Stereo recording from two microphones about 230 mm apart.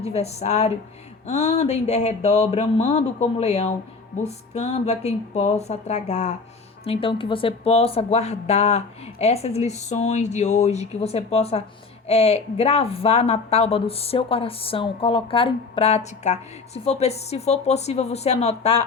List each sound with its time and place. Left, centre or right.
0.1 s a woman's voice: left